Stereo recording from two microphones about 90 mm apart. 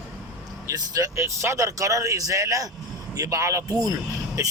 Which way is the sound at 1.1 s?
30° right (ahead or behind).